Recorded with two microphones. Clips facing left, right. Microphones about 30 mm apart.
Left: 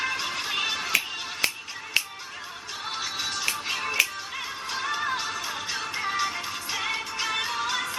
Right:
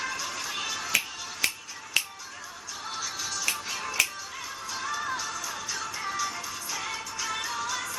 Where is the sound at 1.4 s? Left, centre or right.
Left.